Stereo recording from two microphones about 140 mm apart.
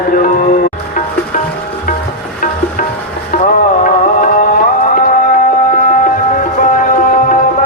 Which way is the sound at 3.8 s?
75° left (ahead or behind).